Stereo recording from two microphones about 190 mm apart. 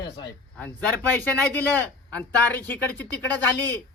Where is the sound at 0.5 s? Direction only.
5° left (ahead or behind).